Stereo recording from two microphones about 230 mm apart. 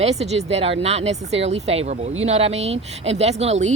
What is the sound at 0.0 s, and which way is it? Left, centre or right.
Speech, right.